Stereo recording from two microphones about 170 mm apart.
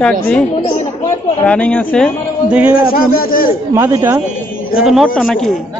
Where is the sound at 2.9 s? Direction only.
60° left (ahead or behind).